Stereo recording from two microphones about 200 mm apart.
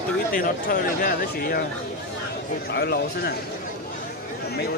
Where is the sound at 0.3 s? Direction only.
45° left (ahead or behind).